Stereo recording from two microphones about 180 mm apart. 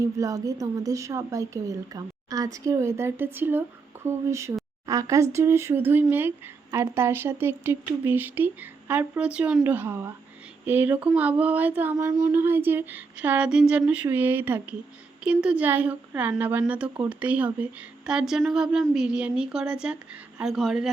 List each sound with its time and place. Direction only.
0.0 s speech: 20° right (ahead or behind); by 20.9 s centre (ahead or behind)